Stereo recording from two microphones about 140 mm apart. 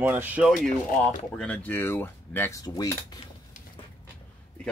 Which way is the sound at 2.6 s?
25° left (ahead or behind).